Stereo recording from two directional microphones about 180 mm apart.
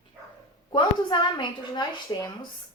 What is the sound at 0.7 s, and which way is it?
A woman's voice, 25° left (ahead or behind).